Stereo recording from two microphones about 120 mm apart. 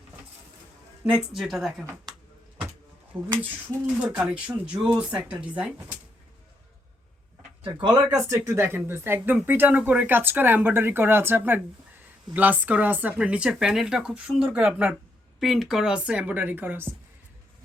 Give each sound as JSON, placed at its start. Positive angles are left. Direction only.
{"t": 1.0, "sound": "a woman's voice", "side_deg": -5}
{"t": 3.1, "sound": "speech", "side_deg": -15}
{"t": 7.6, "sound": "speech", "side_deg": -35}